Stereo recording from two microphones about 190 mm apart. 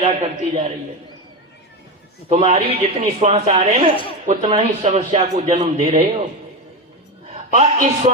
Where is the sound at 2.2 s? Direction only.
30° right (ahead or behind).